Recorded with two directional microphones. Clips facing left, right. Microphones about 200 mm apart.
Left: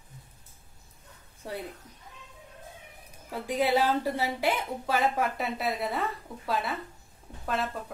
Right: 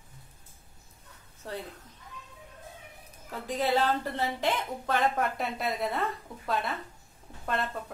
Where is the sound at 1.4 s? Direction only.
10° left (ahead or behind).